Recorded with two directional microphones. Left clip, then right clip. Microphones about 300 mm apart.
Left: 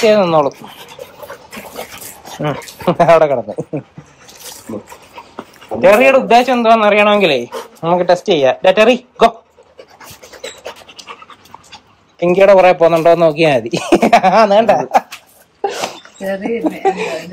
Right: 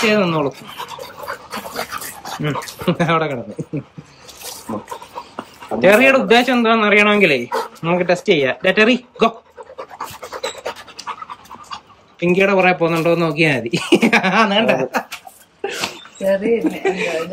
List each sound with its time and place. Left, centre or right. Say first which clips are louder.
0.2 s speech: left 7 dB; centre
1.5 s dog: right 3 dB; centre
3.6 s speech: left 7 dB; centre
5.8 s speech: left 3 dB; centre
9.9 s pant: right 7 dB; centre
12.2 s speech: left 7 dB; centre
15.6 s a sound: left 4 dB; centre